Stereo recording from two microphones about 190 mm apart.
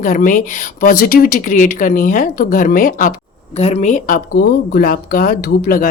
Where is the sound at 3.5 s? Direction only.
35° left (ahead or behind); by 5.8 s 50° left (ahead or behind).